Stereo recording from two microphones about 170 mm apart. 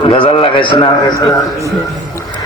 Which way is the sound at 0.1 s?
30° left (ahead or behind).